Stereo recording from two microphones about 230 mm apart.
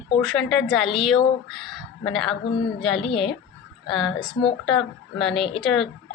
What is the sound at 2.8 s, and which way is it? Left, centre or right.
A woman's voice, centre.